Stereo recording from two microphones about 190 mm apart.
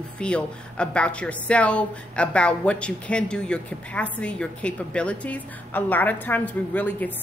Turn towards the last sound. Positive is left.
turn(degrees=10)  # may be behind; listen again after turning